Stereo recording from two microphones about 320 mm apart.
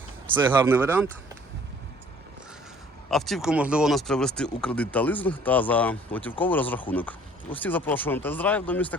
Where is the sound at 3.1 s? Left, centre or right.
Centre.